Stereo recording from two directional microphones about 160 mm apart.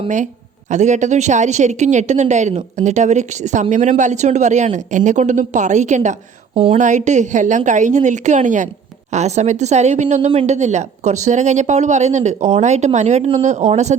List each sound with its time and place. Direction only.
0.7 s speech: 50° right (ahead or behind)